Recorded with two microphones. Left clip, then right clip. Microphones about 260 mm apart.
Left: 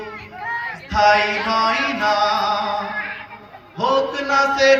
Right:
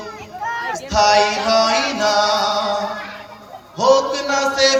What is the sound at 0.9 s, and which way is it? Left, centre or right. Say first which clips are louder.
Chant: right 1 dB; centre.